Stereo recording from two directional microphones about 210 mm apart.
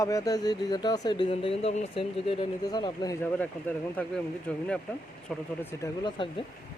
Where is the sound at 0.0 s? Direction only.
15° left (ahead or behind).